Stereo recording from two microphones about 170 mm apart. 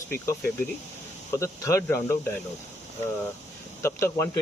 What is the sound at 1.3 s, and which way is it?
Speech, 15° left (ahead or behind).